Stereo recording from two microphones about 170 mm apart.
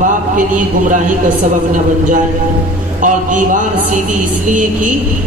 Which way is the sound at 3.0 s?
50° right (ahead or behind).